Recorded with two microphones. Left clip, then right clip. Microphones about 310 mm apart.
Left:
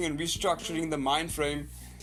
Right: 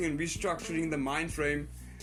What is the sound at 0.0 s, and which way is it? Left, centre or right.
Speech, left.